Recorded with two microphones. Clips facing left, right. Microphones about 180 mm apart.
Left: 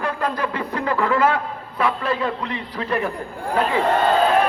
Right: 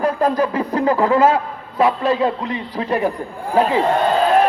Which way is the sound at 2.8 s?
25° right (ahead or behind).